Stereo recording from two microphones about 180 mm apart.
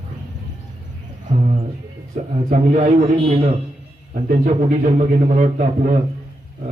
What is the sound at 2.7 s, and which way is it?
Speech, 40° right (ahead or behind).